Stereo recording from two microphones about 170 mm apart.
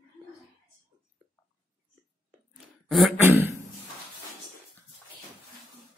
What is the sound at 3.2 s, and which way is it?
Speech, 15° right (ahead or behind).